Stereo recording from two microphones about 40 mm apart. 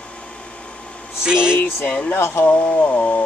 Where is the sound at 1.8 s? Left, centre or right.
Left.